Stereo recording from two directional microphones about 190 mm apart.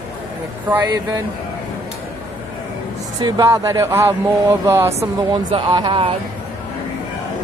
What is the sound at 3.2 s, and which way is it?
Speech, 15° right (ahead or behind).